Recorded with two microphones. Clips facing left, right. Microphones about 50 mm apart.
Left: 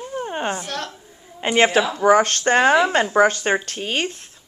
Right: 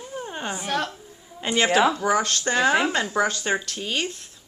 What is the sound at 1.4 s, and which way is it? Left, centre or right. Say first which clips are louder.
Speech: left 2 dB; left.